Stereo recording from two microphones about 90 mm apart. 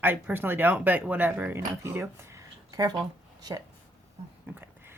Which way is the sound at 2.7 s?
45° right (ahead or behind).